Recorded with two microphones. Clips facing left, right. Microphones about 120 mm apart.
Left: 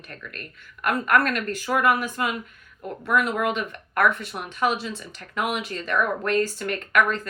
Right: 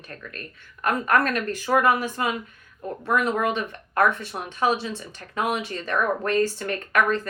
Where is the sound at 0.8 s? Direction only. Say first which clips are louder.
Even; 30° right (ahead or behind).